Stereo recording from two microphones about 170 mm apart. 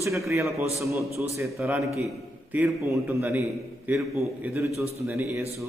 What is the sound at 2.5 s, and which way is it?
A man's voice, 15° right (ahead or behind).